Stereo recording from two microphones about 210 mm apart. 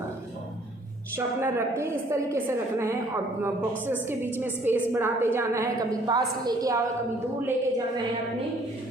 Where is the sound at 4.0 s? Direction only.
10° right (ahead or behind).